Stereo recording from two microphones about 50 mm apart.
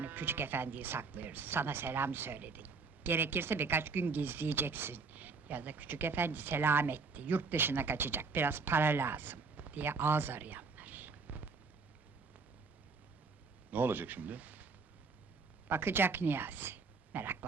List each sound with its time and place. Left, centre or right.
0.0 s speech: right
5.1 s speech: right
13.7 s speech: right
15.6 s speech: right
17.1 s a sound: right